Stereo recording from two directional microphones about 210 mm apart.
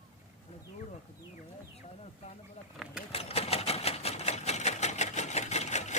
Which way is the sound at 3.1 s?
30° left (ahead or behind).